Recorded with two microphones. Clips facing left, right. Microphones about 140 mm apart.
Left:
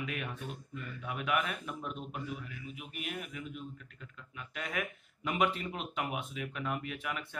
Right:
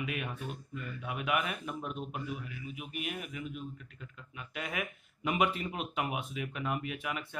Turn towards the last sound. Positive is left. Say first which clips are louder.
# right 1 dB
turn(degrees=-10)  # may be behind; listen again after turning